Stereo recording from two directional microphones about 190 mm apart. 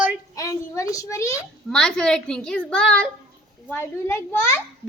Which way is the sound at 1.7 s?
5° left (ahead or behind).